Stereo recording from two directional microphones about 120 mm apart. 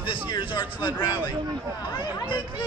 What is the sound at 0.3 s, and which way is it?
Speech, 40° left (ahead or behind).